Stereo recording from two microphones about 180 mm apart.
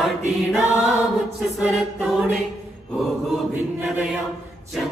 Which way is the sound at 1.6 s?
Centre (ahead or behind).